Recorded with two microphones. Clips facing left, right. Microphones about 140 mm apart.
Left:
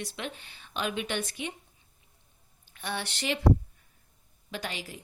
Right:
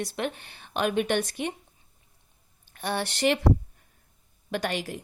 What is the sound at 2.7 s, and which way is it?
Speech, 50° right (ahead or behind).